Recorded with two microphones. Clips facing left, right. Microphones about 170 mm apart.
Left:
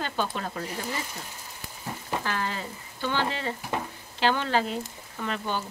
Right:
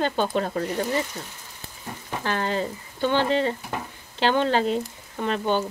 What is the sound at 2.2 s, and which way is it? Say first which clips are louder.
Speech: right 10 dB; 30° right (ahead or behind).